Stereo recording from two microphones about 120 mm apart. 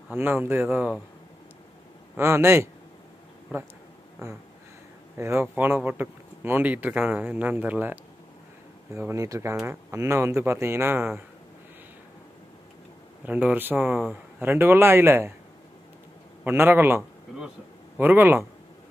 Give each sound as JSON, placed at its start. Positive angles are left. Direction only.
{"t": 0.1, "sound": "speech", "side_deg": -15}
{"t": 2.1, "sound": "speech", "side_deg": -20}
{"t": 5.1, "sound": "speech", "side_deg": -20}
{"t": 8.9, "sound": "speech", "side_deg": -25}
{"t": 13.2, "sound": "speech", "side_deg": -15}
{"t": 16.4, "sound": "speech", "side_deg": -15}